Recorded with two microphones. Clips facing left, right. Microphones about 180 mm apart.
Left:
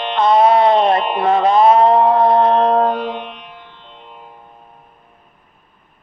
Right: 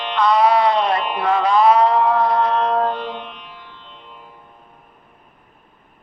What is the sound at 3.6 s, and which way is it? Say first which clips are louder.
Music: left 1 dB; 55° left (ahead or behind).